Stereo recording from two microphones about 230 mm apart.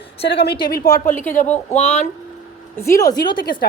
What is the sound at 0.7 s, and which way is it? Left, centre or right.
Speech, left.